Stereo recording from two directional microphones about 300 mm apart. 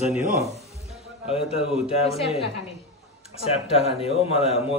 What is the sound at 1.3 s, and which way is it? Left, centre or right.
Speech, centre.